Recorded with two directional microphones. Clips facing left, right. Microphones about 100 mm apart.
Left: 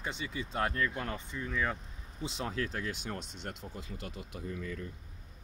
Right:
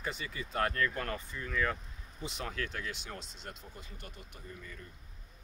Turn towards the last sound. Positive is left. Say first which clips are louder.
# left 9 dB
turn(degrees=90)